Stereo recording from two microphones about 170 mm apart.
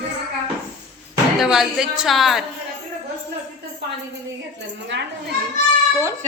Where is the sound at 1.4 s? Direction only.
5° right (ahead or behind).